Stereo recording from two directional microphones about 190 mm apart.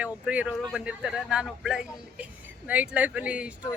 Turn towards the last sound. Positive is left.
turn(degrees=-5)  # may be behind; listen again after turning